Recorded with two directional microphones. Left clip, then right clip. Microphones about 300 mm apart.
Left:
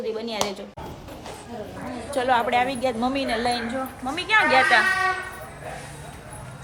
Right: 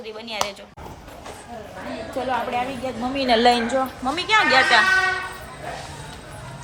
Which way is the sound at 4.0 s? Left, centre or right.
Centre.